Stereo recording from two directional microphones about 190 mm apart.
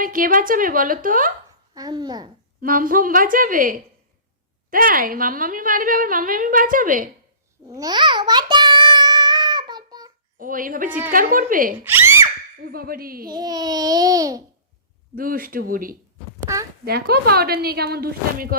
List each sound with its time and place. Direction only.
0.0 s a woman's voice: 45° right (ahead or behind)
1.7 s babbling: 20° right (ahead or behind)
2.6 s a woman's voice: 45° right (ahead or behind)
7.7 s a sound: 20° right (ahead or behind)
10.3 s a woman's voice: 45° right (ahead or behind)
11.9 s gasp: 10° right (ahead or behind)
12.7 s a woman's voice: 50° right (ahead or behind)
13.3 s babbling: 20° right (ahead or behind)
15.1 s a woman's voice: 50° right (ahead or behind)